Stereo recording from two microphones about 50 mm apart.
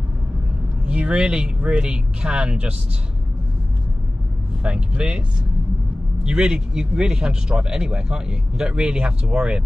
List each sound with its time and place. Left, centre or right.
0.8 s speech: right
4.6 s speech: right
6.2 s speech: centre